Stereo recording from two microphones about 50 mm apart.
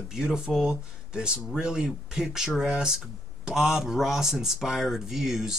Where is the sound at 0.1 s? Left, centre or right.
Centre.